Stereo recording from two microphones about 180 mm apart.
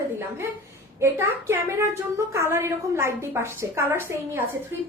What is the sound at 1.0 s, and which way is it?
A woman's voice, 15° right (ahead or behind).